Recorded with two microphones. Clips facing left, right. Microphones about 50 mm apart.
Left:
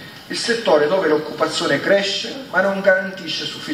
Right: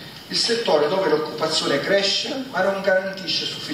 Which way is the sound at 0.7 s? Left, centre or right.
Centre.